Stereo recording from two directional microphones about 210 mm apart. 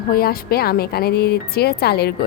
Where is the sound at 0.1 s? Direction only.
45° left (ahead or behind).